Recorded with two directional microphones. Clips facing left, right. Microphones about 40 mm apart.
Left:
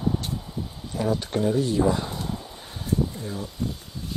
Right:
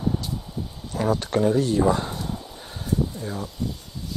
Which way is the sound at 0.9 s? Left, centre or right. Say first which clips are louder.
Right 3 dB; right.